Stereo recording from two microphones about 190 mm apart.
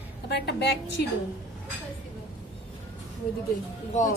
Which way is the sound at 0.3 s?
60° left (ahead or behind).